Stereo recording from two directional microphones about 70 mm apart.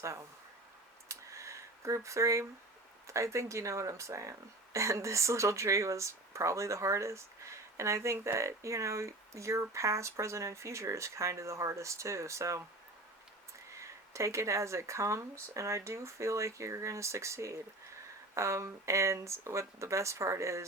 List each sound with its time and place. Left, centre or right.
0.0 s speech: right
1.0 s a sound: right
3.1 s speech: right
13.7 s speech: right